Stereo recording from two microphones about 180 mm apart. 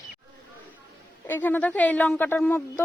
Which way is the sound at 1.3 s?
10° left (ahead or behind).